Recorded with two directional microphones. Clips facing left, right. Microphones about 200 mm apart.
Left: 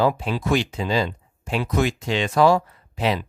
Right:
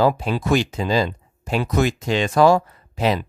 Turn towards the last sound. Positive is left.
turn(degrees=-40)  # may be behind; listen again after turning